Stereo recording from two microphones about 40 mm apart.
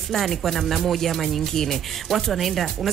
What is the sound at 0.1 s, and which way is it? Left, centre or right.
Speech, centre.